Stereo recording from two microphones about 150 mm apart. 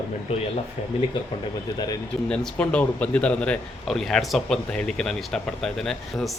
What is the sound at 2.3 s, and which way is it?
Speech, 5° left (ahead or behind).